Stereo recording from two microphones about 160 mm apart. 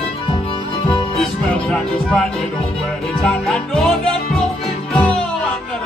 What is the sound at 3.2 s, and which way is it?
Music, 5° left (ahead or behind).